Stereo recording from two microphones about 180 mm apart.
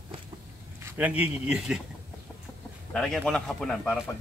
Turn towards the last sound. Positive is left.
turn(degrees=0)  # may be behind; listen again after turning